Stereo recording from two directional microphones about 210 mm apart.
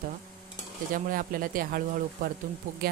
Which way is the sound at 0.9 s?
40° right (ahead or behind).